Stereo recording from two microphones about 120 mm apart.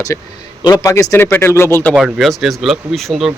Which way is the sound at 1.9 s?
5° right (ahead or behind).